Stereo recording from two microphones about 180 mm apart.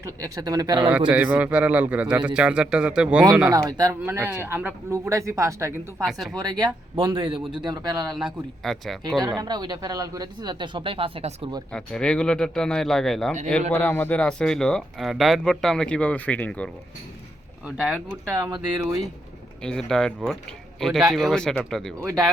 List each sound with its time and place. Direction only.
0.0 s speech: 20° right (ahead or behind)
0.9 s a man's voice: 5° right (ahead or behind)
3.5 s a man's voice: 20° right (ahead or behind)
6.0 s speech: centre (ahead or behind)
6.4 s speech: 25° right (ahead or behind)
8.1 s speech: centre (ahead or behind)
9.4 s speech: 25° right (ahead or behind)
11.7 s speech: 5° left (ahead or behind)
17.7 s speech: centre (ahead or behind)
18.3 s a man's voice: 15° right (ahead or behind)
19.6 s speech: 5° left (ahead or behind)